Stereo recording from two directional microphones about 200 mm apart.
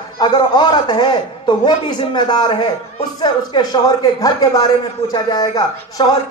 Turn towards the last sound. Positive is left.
turn(degrees=20)  # may be behind; listen again after turning